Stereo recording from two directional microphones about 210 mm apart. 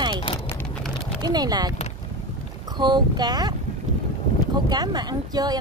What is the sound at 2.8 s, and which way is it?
Speech, 20° right (ahead or behind).